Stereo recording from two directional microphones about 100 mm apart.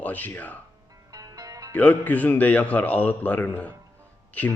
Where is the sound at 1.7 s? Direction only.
15° left (ahead or behind).